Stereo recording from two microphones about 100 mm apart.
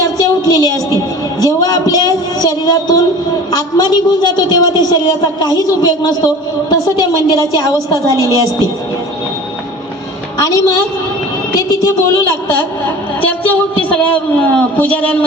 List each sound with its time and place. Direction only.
0.4 s a woman's voice: 40° left (ahead or behind)
1.4 s a sound: 40° left (ahead or behind)
3.5 s a woman's voice: 45° left (ahead or behind)
10.3 s a woman's voice: 35° left (ahead or behind)
11.9 s a woman's voice: 30° left (ahead or behind)
13.2 s a man's voice: 15° left (ahead or behind)